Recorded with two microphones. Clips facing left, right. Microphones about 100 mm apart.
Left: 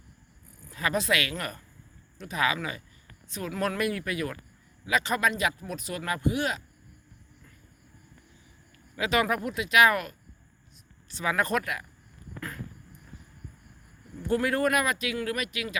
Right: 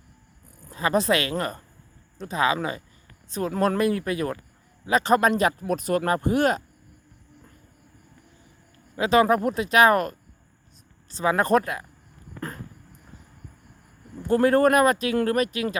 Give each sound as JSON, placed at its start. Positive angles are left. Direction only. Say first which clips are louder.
{"t": 0.7, "sound": "speech", "louder": "right 6 dB", "side_deg": -30}
{"t": 9.0, "sound": "speech", "louder": "right 7 dB", "side_deg": -35}
{"t": 14.2, "sound": "speech", "louder": "right 7 dB", "side_deg": -35}